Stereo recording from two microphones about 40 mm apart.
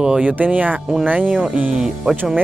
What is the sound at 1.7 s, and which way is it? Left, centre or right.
Speech, centre.